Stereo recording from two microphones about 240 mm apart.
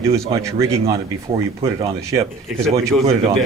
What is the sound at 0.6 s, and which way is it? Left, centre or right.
Speech, right.